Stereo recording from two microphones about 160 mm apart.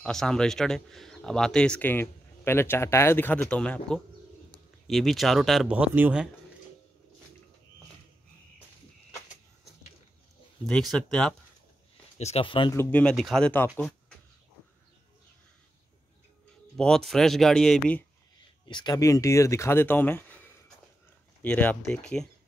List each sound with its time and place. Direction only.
0.0 s speech: 5° left (ahead or behind)
10.7 s speech: 5° left (ahead or behind)
12.2 s speech: 40° left (ahead or behind)
12.7 s speech: 5° left (ahead or behind)
13.7 s a sound: 5° left (ahead or behind)
16.7 s speech: 5° left (ahead or behind)
18.7 s speech: 30° left (ahead or behind); by 22.3 s 5° left (ahead or behind)